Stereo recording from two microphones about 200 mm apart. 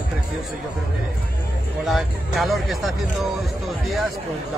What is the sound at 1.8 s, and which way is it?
Speech, centre (ahead or behind).